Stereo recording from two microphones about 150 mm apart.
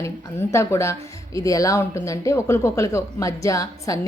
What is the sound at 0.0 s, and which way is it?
Speech, 20° left (ahead or behind).